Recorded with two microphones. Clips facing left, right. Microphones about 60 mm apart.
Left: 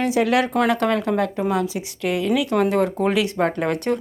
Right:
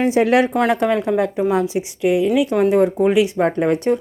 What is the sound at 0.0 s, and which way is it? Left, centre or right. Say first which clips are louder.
Speech: right 4 dB; right.